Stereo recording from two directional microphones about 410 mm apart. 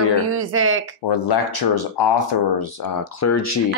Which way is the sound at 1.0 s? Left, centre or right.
Left.